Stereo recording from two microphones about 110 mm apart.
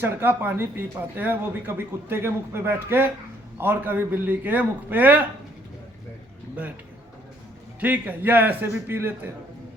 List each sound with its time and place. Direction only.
0.0 s a man's voice: 20° right (ahead or behind)
7.8 s a man's voice: 15° right (ahead or behind)